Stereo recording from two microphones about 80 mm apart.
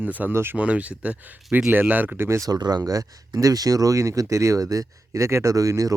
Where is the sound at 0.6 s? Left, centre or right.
Centre.